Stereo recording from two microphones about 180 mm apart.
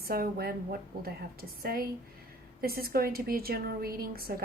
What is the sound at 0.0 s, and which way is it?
A woman's voice, 55° right (ahead or behind).